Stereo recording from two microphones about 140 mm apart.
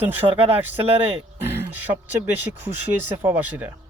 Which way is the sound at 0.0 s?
15° right (ahead or behind).